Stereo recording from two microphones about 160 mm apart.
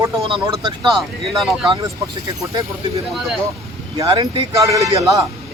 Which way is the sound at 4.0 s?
20° right (ahead or behind).